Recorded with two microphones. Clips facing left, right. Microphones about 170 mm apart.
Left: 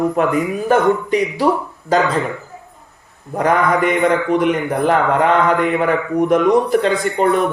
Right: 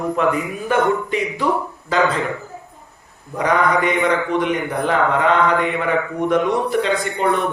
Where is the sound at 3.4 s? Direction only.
50° left (ahead or behind).